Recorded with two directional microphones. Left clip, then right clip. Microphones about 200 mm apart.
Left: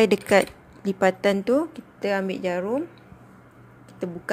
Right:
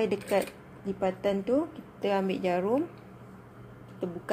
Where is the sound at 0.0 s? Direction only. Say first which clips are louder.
Left 9 dB; 40° left (ahead or behind).